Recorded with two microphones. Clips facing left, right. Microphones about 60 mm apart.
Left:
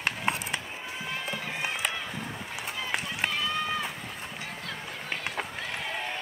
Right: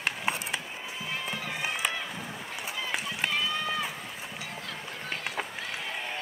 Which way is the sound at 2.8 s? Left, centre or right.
Centre.